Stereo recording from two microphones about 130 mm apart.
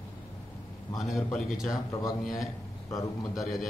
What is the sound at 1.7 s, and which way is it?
A man's voice, 25° left (ahead or behind).